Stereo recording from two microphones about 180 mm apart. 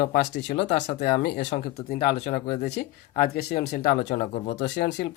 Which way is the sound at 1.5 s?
55° left (ahead or behind).